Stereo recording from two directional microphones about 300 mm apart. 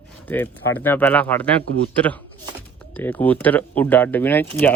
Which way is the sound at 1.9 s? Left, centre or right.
Centre.